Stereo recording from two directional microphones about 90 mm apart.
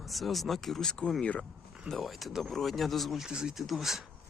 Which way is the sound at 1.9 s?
Centre (ahead or behind).